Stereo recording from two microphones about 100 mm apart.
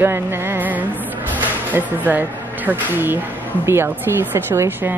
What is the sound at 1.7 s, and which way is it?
Speech, 20° right (ahead or behind).